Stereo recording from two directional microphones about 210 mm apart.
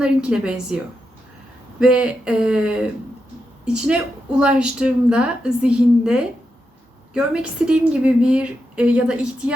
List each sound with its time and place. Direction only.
0.0 s speech: 5° right (ahead or behind)
1.8 s speech: 5° right (ahead or behind)